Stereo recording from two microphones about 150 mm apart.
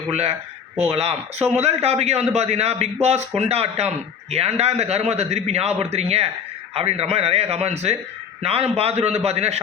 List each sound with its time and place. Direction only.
0.1 s a man's voice: 45° right (ahead or behind)